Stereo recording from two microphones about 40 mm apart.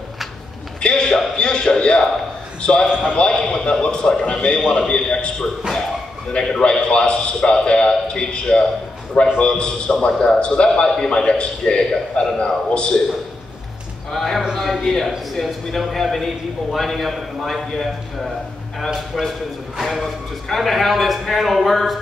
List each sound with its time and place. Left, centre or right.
0.7 s a sound: left
1.3 s a man's voice: left
2.9 s a man's voice: right
3.2 s a man's voice: centre
10.7 s a man's voice: centre
11.1 s a man's voice: left
14.1 s a man's voice: centre
19.8 s a man's voice: centre